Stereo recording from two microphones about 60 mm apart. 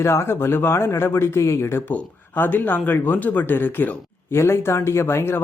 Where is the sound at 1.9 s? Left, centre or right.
Left.